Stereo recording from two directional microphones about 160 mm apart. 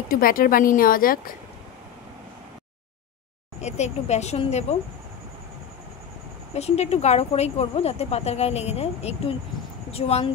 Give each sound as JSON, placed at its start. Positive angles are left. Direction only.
{"t": 0.1, "sound": "speech", "side_deg": 65}
{"t": 3.6, "sound": "speech", "side_deg": 45}
{"t": 6.5, "sound": "speech", "side_deg": 40}